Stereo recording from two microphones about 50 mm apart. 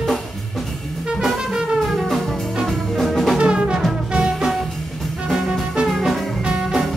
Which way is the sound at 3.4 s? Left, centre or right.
Centre.